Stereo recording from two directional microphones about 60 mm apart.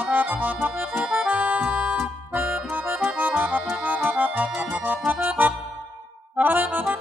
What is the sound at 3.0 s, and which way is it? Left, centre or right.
Accordion, right.